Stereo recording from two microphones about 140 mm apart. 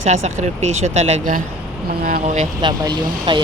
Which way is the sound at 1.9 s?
90° right.